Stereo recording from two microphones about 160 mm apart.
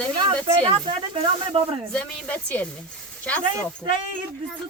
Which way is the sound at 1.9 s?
5° left (ahead or behind).